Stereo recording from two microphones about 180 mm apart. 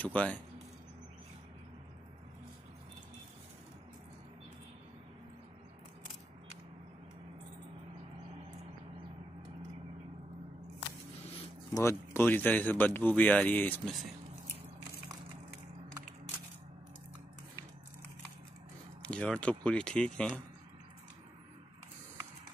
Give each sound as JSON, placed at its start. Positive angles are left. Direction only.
{"t": 0.0, "sound": "speech", "side_deg": 10}
{"t": 11.7, "sound": "speech", "side_deg": 15}
{"t": 19.0, "sound": "speech", "side_deg": 5}